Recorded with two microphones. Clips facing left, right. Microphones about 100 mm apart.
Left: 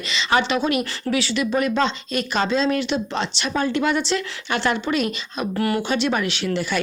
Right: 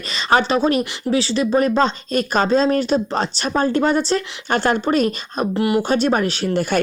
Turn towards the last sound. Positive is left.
turn(degrees=-50)  # may be behind; listen again after turning